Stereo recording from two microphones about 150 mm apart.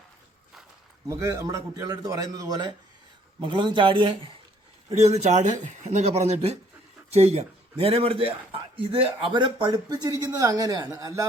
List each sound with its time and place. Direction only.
1.0 s speech: 20° right (ahead or behind)
5.0 s speech: 50° right (ahead or behind); by 11.3 s 20° right (ahead or behind)